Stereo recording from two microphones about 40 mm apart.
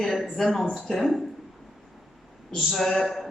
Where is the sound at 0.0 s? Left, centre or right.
Centre.